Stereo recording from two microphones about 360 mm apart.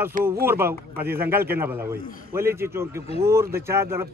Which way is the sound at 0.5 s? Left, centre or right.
Centre.